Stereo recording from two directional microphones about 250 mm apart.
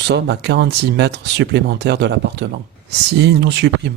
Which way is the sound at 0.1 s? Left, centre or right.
Right.